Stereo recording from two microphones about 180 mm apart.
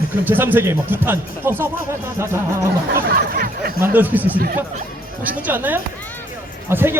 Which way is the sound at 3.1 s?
55° right (ahead or behind).